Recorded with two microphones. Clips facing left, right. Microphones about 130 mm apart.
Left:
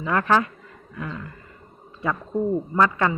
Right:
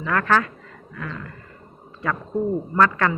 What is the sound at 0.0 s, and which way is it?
Speech, 20° left (ahead or behind).